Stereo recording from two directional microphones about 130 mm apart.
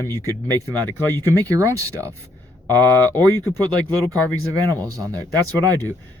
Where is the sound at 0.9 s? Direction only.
15° left (ahead or behind).